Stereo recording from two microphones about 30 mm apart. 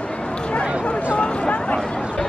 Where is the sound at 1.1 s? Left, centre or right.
Left.